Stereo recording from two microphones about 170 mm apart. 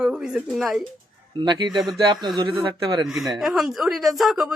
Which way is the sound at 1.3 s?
30° right (ahead or behind).